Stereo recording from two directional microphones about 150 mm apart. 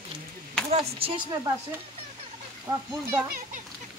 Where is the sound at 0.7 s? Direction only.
40° right (ahead or behind).